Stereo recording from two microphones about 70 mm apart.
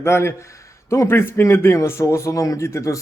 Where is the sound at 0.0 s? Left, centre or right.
Left.